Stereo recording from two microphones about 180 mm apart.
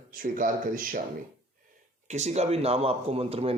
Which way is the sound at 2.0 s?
40° right (ahead or behind).